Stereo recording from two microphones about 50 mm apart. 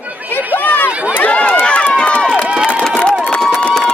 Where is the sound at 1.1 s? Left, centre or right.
Left.